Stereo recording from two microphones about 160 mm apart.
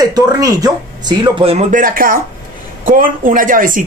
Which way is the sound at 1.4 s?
50° right (ahead or behind).